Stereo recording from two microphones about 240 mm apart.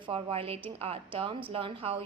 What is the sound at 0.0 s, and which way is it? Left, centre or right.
A woman's voice, right.